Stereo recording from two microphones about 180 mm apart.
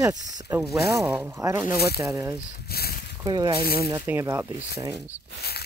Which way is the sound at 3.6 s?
55° left (ahead or behind).